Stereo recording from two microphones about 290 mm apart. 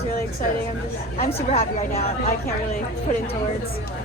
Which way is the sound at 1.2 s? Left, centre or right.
Left.